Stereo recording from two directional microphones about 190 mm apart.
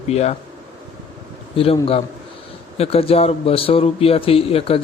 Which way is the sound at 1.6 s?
30° left (ahead or behind).